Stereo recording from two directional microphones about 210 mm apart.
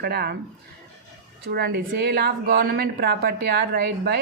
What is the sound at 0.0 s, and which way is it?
Speech, 50° right (ahead or behind).